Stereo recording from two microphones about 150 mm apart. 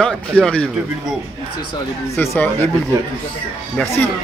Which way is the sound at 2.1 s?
15° left (ahead or behind).